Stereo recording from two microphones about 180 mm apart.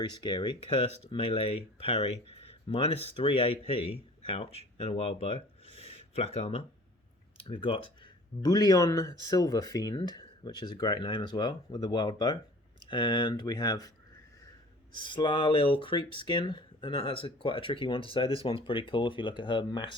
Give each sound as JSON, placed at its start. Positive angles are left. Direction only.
{"t": 0.0, "sound": "speech", "side_deg": 25}
{"t": 4.8, "sound": "speech", "side_deg": 35}
{"t": 14.9, "sound": "speech", "side_deg": 25}